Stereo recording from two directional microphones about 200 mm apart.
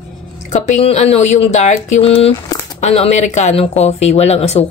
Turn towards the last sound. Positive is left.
turn(degrees=30)  # may be behind; listen again after turning